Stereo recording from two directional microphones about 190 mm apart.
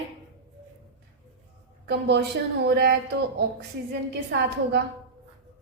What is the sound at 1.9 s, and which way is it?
A woman's voice, 60° right (ahead or behind).